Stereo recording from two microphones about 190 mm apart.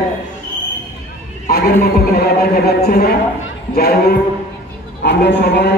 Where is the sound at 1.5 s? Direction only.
55° left (ahead or behind).